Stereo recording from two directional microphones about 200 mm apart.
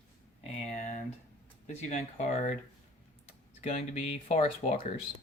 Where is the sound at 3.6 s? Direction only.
35° left (ahead or behind).